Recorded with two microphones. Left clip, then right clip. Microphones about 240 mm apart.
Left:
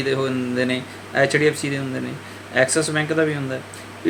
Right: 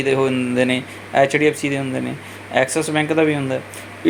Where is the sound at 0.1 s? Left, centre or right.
Centre.